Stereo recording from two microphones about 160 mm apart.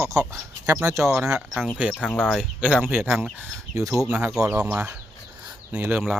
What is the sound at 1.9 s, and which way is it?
Speech, 5° left (ahead or behind).